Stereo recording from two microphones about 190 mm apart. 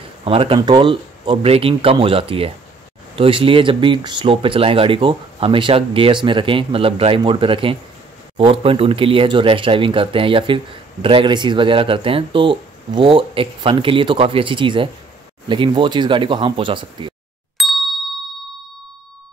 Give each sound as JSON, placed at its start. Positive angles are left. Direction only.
{"t": 0.2, "sound": "speech", "side_deg": -30}
{"t": 17.6, "sound": "ding", "side_deg": 0}